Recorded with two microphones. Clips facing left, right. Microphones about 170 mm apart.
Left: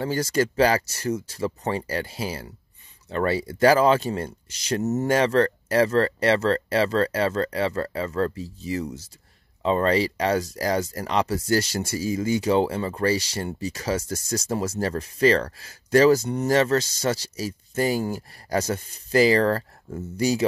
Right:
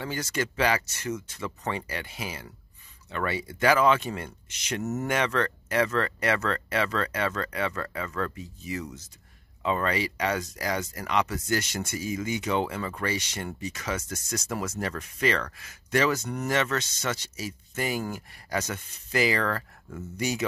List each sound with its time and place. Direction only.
0.0 s speech: 35° left (ahead or behind)